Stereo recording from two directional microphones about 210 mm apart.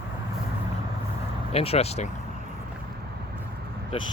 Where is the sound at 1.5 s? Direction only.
30° left (ahead or behind).